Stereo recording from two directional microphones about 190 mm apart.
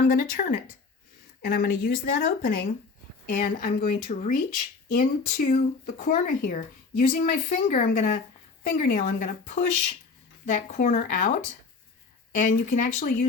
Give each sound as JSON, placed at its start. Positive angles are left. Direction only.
{"t": 0.0, "sound": "speech", "side_deg": 50}